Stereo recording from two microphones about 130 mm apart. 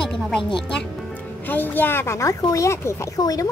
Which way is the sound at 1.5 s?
15° left (ahead or behind).